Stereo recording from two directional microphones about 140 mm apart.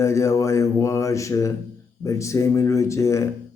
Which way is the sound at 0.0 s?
20° left (ahead or behind).